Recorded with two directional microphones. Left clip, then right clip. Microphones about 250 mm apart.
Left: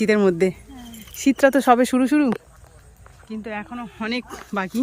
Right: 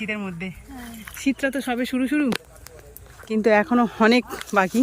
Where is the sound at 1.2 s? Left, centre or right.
Centre.